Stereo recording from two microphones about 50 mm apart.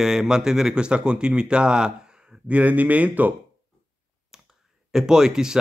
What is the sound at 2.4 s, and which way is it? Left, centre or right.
Speech, right.